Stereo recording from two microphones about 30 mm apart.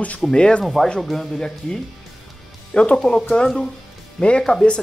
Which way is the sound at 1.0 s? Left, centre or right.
Centre.